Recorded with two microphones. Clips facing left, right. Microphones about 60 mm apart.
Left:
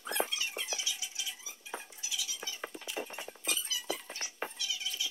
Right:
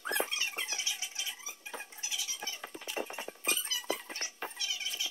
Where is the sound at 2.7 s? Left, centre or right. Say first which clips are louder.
Right 2 dB; centre.